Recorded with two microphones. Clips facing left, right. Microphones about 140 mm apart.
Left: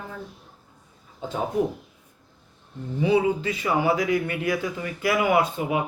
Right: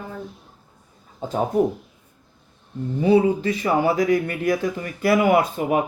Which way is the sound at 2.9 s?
45° right (ahead or behind).